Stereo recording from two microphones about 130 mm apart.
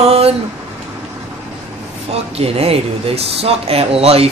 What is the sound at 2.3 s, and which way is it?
Speech, 50° right (ahead or behind).